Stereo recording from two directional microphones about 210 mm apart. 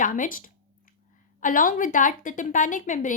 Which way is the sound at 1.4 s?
40° left (ahead or behind).